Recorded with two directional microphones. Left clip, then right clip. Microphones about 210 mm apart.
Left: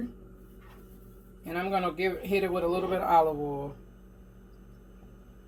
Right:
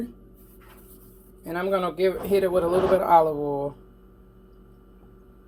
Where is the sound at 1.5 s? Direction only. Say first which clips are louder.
Right 4 dB; 45° right (ahead or behind).